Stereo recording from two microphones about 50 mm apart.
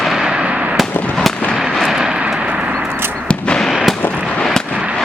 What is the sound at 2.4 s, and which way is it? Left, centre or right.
Vehicle, right.